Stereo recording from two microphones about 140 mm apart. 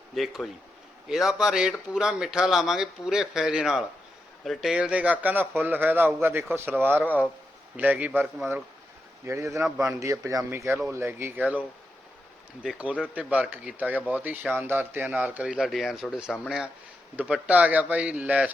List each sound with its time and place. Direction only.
0.1 s a man's voice: centre (ahead or behind)
12.6 s speech: 5° right (ahead or behind)